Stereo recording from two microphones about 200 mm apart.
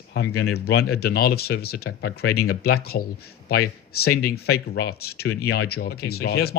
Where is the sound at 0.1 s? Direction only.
80° left.